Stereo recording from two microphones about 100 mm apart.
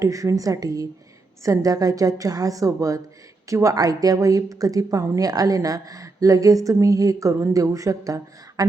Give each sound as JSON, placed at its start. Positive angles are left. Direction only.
{"t": 0.0, "sound": "speech", "side_deg": -30}